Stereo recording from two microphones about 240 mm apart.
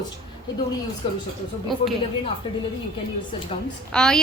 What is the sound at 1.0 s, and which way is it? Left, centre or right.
Speech, left.